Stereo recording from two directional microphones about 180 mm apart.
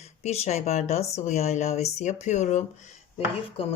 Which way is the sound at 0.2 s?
35° left (ahead or behind).